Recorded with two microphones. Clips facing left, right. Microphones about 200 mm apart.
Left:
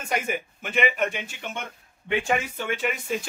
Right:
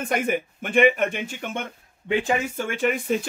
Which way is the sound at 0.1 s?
50° right (ahead or behind).